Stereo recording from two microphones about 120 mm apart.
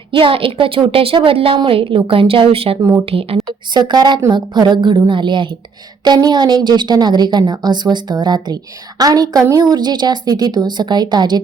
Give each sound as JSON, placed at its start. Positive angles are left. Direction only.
{"t": 0.1, "sound": "a woman's voice", "side_deg": -45}
{"t": 3.8, "sound": "a woman's voice", "side_deg": -35}